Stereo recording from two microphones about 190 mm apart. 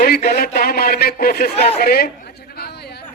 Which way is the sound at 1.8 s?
55° left (ahead or behind).